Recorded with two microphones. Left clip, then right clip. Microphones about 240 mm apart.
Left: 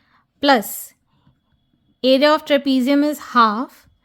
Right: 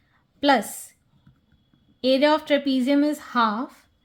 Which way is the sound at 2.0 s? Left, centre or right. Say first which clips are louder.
Left 5 dB; left.